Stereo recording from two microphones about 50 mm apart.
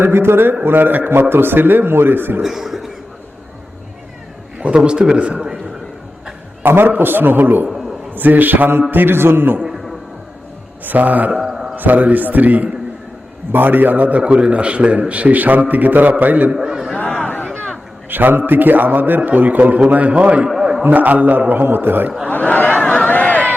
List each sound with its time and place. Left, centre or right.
0.0 s a man's voice: right
2.4 s speech: centre
4.5 s a man's voice: right
6.6 s a man's voice: right
10.8 s a man's voice: right
11.3 s a sound: centre
11.8 s a man's voice: right
16.6 s a man's voice: centre
17.2 s a sound: left
18.1 s a man's voice: right
20.5 s a sound: centre
20.8 s a man's voice: right
22.3 s a sound: left